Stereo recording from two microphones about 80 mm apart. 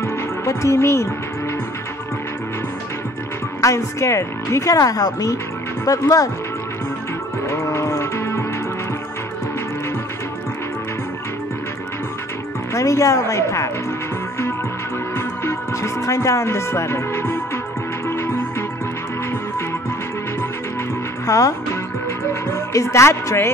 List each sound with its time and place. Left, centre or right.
0.0 s music: left
3.6 s speech: left
7.4 s music: left
12.7 s speech: left
15.1 s music: left
21.3 s speech: left